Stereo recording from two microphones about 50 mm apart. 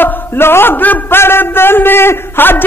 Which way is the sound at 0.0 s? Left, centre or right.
Left.